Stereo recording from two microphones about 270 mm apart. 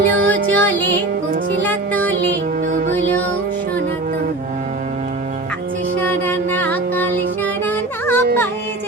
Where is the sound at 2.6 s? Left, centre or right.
Right.